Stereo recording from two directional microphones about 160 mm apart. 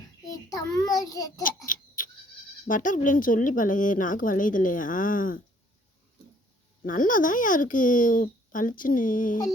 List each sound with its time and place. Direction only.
0.3 s child singing: 20° left (ahead or behind)
1.6 s a sound: 55° left (ahead or behind)
2.6 s a woman's voice: 55° left (ahead or behind)
6.8 s a woman's voice: 55° left (ahead or behind)